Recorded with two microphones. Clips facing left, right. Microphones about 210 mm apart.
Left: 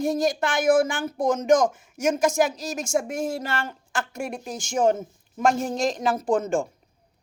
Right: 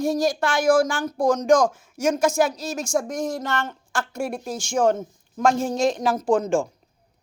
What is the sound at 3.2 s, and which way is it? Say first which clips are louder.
Speech: right 1 dB; 25° left (ahead or behind).